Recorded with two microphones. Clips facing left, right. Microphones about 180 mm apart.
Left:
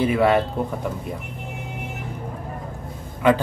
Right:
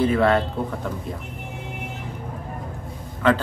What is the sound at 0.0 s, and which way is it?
Speech, 10° left (ahead or behind).